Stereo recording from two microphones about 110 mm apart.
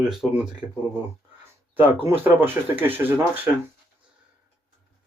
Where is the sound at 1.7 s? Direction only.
15° right (ahead or behind).